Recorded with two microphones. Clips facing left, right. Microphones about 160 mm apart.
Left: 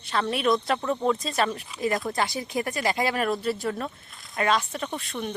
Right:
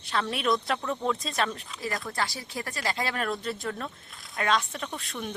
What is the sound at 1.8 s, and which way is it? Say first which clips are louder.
Speech: left 6 dB; 20° left (ahead or behind).